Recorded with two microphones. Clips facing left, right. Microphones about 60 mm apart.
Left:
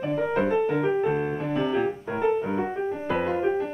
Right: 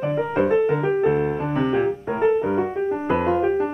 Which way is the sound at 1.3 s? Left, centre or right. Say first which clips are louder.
Right 4 dB; right.